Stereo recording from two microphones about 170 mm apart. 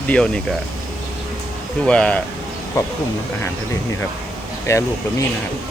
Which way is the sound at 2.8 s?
20° left (ahead or behind).